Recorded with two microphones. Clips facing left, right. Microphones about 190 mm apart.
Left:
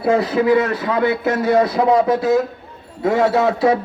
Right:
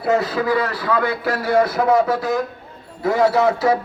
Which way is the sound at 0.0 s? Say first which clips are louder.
Left 3 dB; 25° left (ahead or behind).